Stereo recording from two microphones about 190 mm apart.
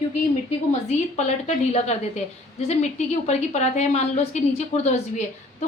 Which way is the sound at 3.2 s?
35° left (ahead or behind).